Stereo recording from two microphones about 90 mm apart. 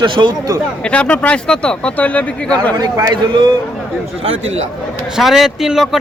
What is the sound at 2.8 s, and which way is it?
Speech, 40° right (ahead or behind).